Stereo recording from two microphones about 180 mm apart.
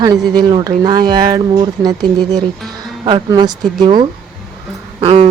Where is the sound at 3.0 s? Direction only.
25° right (ahead or behind).